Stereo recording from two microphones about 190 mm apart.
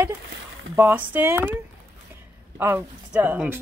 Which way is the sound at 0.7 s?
10° right (ahead or behind).